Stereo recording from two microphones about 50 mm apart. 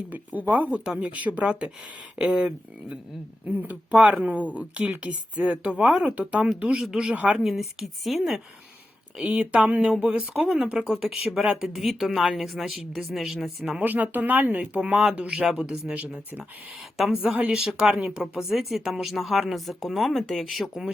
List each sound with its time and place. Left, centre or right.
0.1 s a woman's voice: right; by 2.5 s centre
3.4 s a woman's voice: right
5.8 s speech: centre
6.1 s a woman's voice: right
7.3 s speech: centre
9.2 s a woman's voice: right; by 13.3 s centre
13.8 s a woman's voice: right
15.4 s speech: centre
16.0 s a woman's voice: right
17.5 s speech: centre
18.3 s speech: centre